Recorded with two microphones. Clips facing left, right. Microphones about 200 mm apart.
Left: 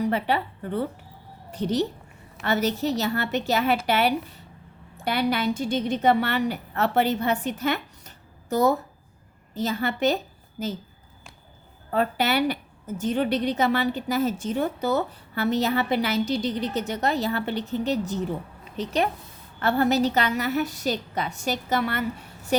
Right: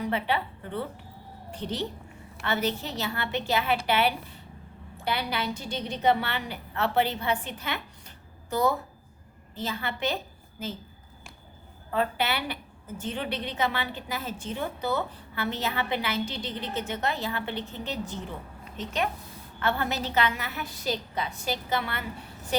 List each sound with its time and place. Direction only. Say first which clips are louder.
0.1 s a woman's voice: left 4 dB; 40° left (ahead or behind)
11.9 s a woman's voice: left 4 dB; 40° left (ahead or behind)
19.5 s a woman's voice: left 7 dB; 40° left (ahead or behind)